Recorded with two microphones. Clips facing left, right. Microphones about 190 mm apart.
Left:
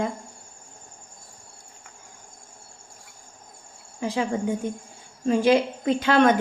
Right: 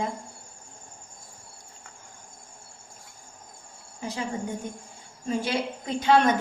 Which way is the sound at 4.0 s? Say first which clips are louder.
Left 7 dB; 90° left.